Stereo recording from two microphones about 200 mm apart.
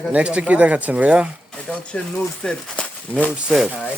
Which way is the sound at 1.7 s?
5° left (ahead or behind).